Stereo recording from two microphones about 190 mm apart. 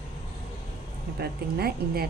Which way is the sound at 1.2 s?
55° right (ahead or behind).